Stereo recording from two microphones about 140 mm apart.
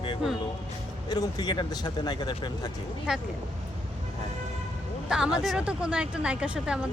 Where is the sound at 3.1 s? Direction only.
5° right (ahead or behind).